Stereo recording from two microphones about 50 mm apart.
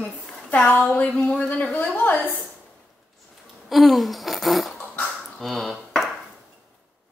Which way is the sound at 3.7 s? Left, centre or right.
Centre.